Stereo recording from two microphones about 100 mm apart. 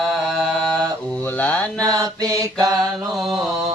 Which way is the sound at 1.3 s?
15° left (ahead or behind).